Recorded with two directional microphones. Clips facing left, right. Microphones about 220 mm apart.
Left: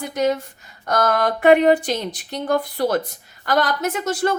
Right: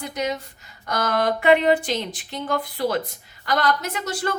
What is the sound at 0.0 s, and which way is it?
A woman's voice, 50° left (ahead or behind).